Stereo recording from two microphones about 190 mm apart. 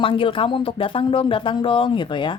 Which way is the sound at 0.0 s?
25° left (ahead or behind).